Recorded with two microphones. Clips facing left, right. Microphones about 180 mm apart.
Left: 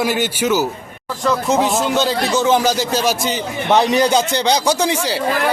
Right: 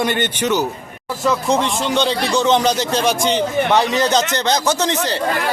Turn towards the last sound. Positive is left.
turn(degrees=10)  # may be behind; listen again after turning